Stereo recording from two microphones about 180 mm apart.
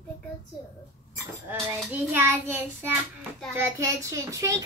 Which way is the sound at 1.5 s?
10° right (ahead or behind).